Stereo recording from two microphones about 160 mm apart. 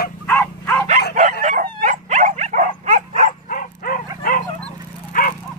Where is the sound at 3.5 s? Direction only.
60° left (ahead or behind).